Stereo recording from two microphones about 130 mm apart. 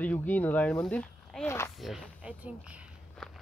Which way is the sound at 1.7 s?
Centre (ahead or behind).